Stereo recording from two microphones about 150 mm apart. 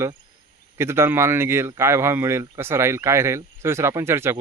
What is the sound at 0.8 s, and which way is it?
Speech, 15° right (ahead or behind).